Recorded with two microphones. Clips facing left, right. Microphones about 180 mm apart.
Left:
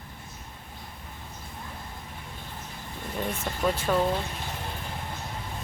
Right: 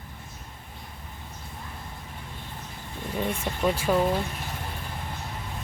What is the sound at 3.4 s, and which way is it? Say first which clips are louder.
Speech: right 1 dB; 10° right (ahead or behind).